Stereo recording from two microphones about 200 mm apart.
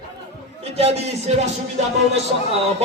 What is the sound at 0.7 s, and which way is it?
Music, 30° right (ahead or behind).